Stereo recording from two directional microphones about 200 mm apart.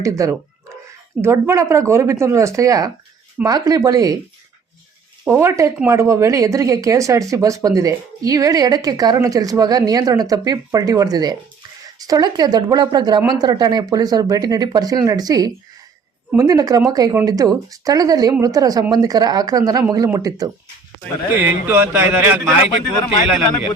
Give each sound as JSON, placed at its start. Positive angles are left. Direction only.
{"t": 0.0, "sound": "a woman's voice", "side_deg": -15}
{"t": 5.2, "sound": "a woman's voice", "side_deg": -10}